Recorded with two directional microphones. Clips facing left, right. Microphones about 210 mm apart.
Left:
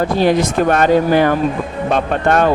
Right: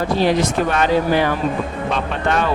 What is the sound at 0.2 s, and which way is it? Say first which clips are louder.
Speech: left 3 dB; 50° left (ahead or behind).